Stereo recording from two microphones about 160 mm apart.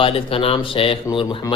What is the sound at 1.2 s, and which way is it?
Speech, 20° left (ahead or behind).